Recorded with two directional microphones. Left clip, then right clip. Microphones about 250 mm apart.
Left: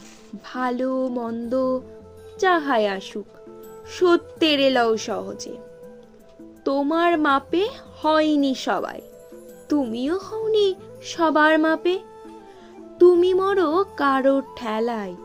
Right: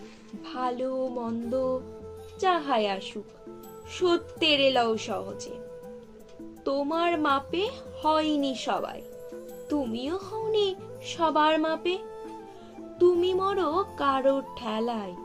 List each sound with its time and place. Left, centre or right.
0.5 s a woman's voice: left
6.7 s a woman's voice: left
13.0 s music: left